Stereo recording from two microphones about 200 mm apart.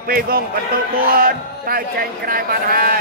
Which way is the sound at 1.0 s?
45° right (ahead or behind).